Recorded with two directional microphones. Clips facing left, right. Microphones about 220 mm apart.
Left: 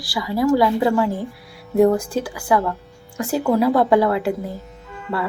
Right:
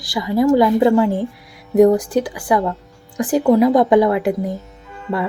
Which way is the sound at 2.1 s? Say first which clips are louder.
Right 3 dB; 20° right (ahead or behind).